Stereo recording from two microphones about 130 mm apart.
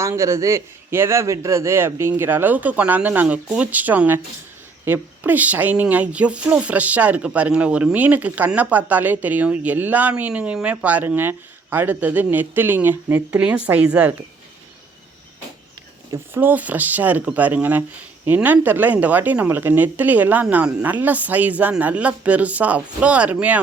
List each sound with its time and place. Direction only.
0.0 s speech: 20° right (ahead or behind)
16.1 s speech: 15° right (ahead or behind)